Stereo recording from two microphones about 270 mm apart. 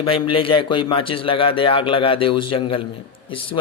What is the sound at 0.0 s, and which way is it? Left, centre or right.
A man's voice, centre.